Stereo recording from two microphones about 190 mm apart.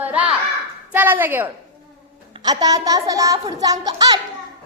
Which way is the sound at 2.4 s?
20° right (ahead or behind).